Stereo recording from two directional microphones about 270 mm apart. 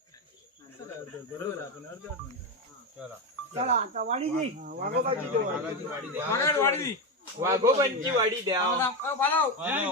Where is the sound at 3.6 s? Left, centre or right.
Right.